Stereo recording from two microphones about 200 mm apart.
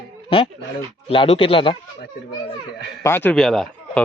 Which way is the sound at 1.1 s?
30° left (ahead or behind).